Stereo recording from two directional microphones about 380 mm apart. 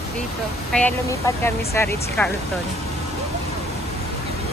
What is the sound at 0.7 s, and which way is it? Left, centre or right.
Speech, centre.